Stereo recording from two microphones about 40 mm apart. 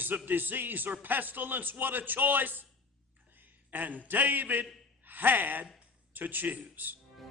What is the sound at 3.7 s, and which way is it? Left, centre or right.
A man's voice, right.